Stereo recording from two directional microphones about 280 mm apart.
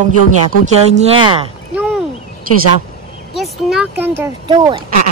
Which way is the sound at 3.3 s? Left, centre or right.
Centre.